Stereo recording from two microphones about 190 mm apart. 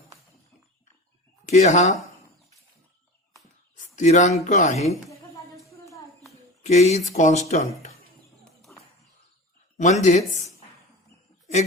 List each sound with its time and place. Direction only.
1.5 s speech: 40° left (ahead or behind)
3.9 s speech: 40° left (ahead or behind)
6.6 s speech: 40° left (ahead or behind)
9.7 s speech: 40° left (ahead or behind)